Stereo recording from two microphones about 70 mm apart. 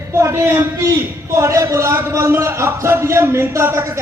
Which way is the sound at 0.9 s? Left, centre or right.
Right.